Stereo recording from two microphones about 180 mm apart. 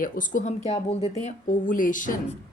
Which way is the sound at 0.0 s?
45° left (ahead or behind).